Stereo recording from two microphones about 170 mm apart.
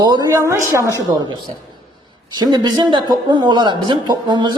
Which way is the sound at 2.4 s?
25° right (ahead or behind).